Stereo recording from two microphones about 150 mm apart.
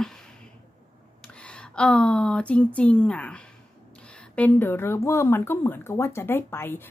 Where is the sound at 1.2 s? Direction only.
5° left (ahead or behind).